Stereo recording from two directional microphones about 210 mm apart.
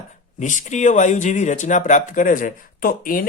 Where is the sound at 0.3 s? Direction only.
35° left (ahead or behind).